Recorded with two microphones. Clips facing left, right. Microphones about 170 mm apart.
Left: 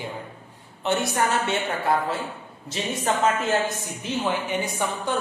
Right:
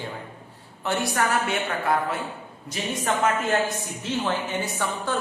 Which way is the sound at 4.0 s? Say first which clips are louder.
Left 1 dB; 15° left (ahead or behind).